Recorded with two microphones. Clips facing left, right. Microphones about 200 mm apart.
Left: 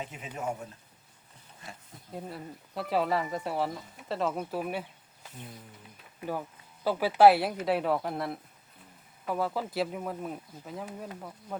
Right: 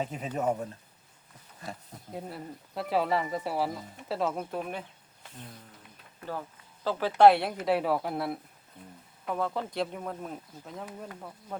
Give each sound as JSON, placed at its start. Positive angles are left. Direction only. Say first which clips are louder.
{"t": 0.0, "sound": "speech", "louder": "right 6 dB", "side_deg": -40}
{"t": 2.1, "sound": "speech", "louder": "right 1 dB", "side_deg": 0}
{"t": 6.1, "sound": "speech", "louder": "left 3 dB", "side_deg": 15}